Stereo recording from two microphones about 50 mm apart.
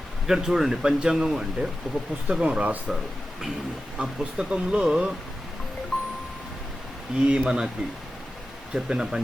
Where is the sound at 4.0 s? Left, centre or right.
Centre.